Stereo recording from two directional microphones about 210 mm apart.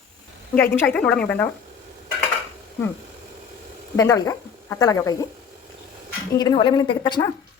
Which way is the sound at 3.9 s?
15° left (ahead or behind).